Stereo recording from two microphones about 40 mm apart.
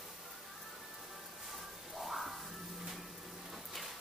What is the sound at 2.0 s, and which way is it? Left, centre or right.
Music, centre.